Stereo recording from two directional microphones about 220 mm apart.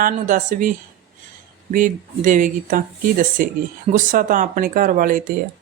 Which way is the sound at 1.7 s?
35° right (ahead or behind).